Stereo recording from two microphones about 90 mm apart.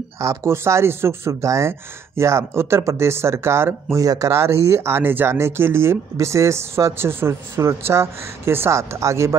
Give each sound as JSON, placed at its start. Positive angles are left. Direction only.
{"t": 0.2, "sound": "speech", "side_deg": -35}